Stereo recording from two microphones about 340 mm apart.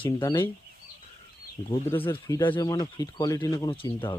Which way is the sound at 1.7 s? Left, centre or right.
Centre.